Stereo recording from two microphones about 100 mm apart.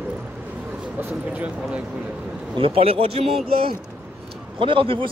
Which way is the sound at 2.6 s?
65° right (ahead or behind).